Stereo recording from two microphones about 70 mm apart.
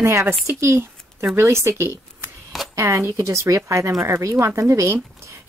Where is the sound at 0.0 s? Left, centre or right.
Right.